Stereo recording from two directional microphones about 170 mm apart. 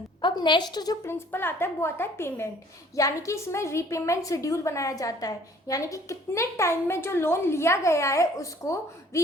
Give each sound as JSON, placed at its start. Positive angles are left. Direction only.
{"t": 0.2, "sound": "a woman's voice", "side_deg": 25}